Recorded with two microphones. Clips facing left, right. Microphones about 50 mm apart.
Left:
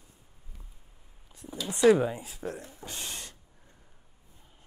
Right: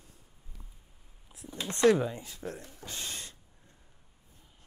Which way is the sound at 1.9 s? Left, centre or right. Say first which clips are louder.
Left 3 dB; centre.